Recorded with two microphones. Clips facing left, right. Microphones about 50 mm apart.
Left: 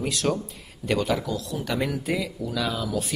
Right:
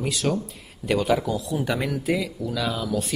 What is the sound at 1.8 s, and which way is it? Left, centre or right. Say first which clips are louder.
Speech: right 2 dB; centre.